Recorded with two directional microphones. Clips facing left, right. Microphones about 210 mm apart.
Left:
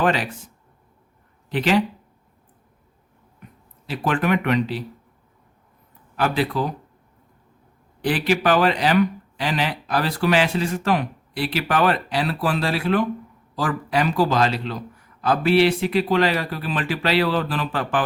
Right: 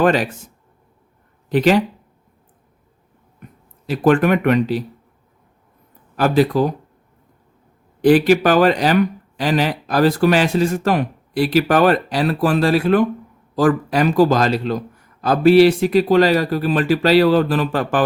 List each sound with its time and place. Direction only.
0.0 s speech: 45° right (ahead or behind)
1.5 s speech: 45° right (ahead or behind)
3.8 s speech: 45° right (ahead or behind)
6.1 s speech: 40° right (ahead or behind)
8.0 s speech: 45° right (ahead or behind)